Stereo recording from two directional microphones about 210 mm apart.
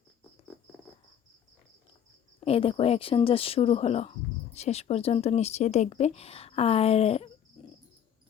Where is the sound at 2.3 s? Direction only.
25° left (ahead or behind).